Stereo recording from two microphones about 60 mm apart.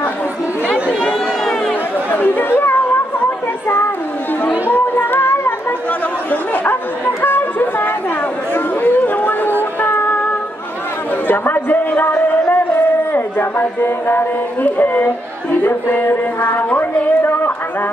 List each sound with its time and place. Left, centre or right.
2.0 s chatter: left
4.5 s music: left
6.5 s bow-wow: left
8.5 s chatter: left
9.6 s child singing: left
11.2 s a sound: left
16.3 s a woman's voice: left
17.2 s a sound: left